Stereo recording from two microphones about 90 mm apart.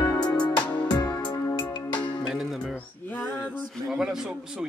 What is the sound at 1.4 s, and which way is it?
Music, 35° left (ahead or behind).